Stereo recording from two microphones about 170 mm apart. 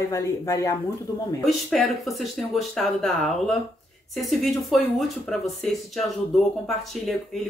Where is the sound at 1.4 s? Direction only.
Centre (ahead or behind).